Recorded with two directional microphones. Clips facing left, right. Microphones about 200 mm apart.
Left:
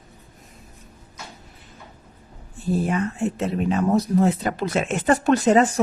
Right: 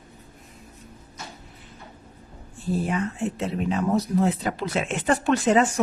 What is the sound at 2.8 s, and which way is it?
Speech, 45° left (ahead or behind).